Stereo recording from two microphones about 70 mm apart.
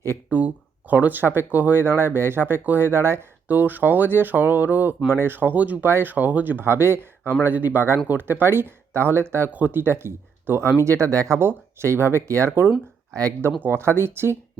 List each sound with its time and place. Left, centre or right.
0.3 s speech: right
3.5 s speech: right
9.5 s speech: right
10.8 s speech: right
11.3 s speech: right
13.6 s speech: right